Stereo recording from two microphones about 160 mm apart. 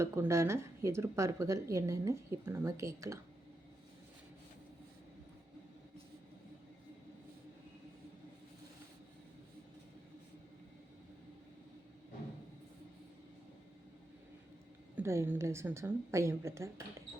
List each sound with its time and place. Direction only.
0.0 s speech: 15° right (ahead or behind)
14.9 s a woman's voice: 15° right (ahead or behind)